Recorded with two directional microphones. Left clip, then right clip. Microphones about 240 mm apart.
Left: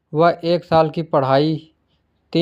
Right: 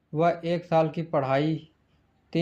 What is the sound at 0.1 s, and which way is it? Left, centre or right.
A man's voice, left.